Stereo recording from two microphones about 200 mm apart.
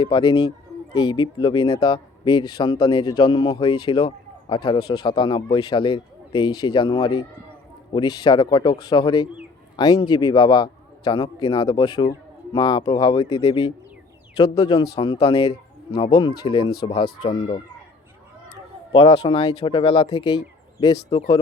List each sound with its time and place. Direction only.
0.0 s a man's voice: 20° left (ahead or behind)
14.6 s a man's voice: 20° left (ahead or behind)
18.9 s a man's voice: 25° left (ahead or behind)